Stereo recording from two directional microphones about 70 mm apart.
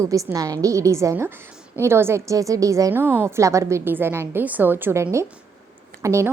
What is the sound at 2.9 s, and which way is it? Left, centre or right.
Speech, right.